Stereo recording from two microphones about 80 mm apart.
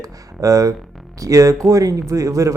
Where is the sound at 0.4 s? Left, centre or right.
Right.